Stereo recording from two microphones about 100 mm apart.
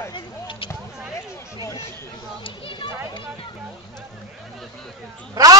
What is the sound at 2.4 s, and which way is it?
Speech, 55° left (ahead or behind).